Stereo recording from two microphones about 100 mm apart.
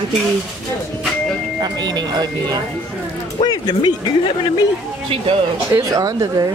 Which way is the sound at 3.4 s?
45° left (ahead or behind).